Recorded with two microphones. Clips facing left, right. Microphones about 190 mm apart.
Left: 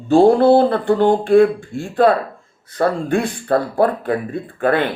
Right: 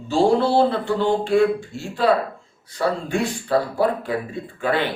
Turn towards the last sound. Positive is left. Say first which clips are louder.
# left 5 dB
turn(degrees=55)  # may be behind; listen again after turning